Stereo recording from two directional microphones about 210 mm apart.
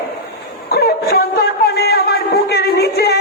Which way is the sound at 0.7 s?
45° left (ahead or behind).